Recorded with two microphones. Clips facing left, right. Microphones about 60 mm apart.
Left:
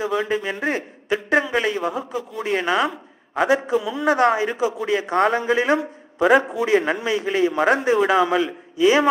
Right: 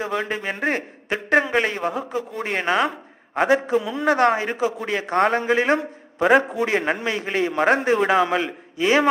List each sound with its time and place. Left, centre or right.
0.0 s a man's voice: right